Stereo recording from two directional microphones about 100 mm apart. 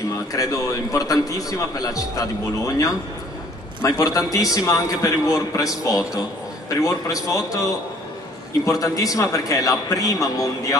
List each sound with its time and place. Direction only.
0.3 s a man's voice: 35° left (ahead or behind)